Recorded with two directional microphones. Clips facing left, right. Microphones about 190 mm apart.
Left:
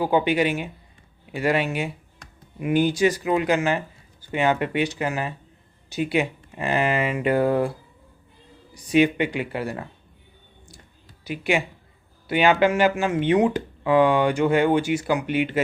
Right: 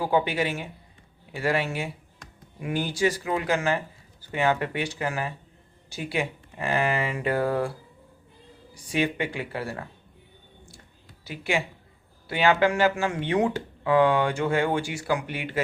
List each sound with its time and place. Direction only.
0.0 s speech: 20° left (ahead or behind)
8.7 s speech: 20° left (ahead or behind)
11.3 s speech: 15° left (ahead or behind)